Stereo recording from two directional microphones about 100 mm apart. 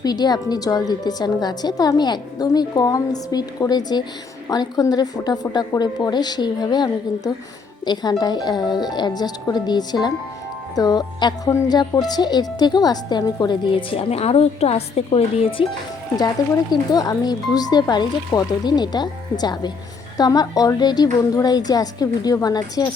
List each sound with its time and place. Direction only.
0.0 s a woman's voice: 45° left (ahead or behind)
13.9 s speech: 80° left
16.9 s a woman's voice: 40° left (ahead or behind)